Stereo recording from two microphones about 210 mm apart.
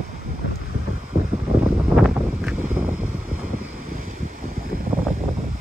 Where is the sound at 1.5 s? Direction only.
Centre (ahead or behind).